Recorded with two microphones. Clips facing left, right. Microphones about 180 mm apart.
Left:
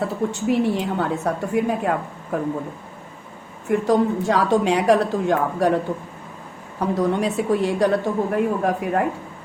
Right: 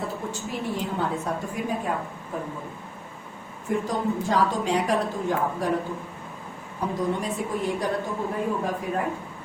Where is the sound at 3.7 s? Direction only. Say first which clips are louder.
Left 7 dB; 75° left (ahead or behind).